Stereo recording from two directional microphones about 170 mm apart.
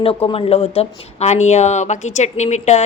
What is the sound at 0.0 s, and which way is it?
A woman's voice, 35° left (ahead or behind).